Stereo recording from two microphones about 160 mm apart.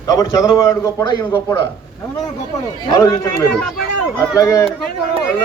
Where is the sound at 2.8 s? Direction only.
20° left (ahead or behind).